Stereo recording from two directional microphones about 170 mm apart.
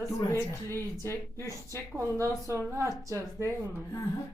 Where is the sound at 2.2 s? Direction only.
15° right (ahead or behind).